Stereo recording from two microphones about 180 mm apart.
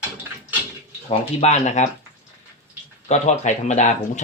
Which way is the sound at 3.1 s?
40° left (ahead or behind).